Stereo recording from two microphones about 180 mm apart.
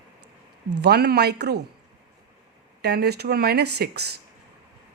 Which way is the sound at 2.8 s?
65° right (ahead or behind).